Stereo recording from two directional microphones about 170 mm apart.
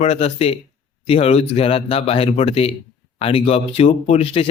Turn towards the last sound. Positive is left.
turn(degrees=35)  # may be behind; listen again after turning